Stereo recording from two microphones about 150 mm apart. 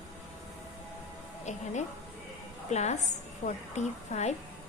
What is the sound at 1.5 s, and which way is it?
Speech, 50° left (ahead or behind).